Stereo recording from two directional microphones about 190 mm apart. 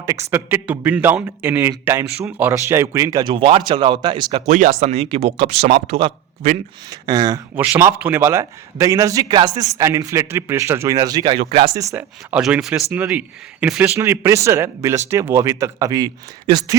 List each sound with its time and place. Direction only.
0.0 s a man's voice: 15° right (ahead or behind); by 6.6 s 35° right (ahead or behind)
6.9 s a man's voice: 20° right (ahead or behind)
11.8 s a man's voice: 15° right (ahead or behind)